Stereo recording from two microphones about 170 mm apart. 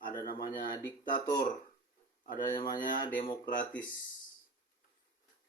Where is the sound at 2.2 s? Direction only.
50° left (ahead or behind).